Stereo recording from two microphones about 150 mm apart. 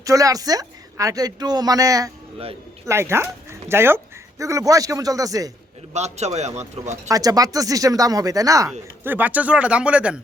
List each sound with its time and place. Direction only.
0.0 s a woman's voice: 20° right (ahead or behind)
5.9 s a man's voice: 45° right (ahead or behind)
7.1 s a woman's voice: 25° right (ahead or behind)
9.0 s speech: 10° right (ahead or behind)